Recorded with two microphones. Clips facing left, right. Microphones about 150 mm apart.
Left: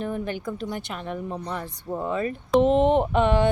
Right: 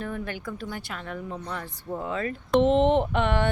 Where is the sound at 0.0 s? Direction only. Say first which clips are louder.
Left 4 dB; 20° left (ahead or behind).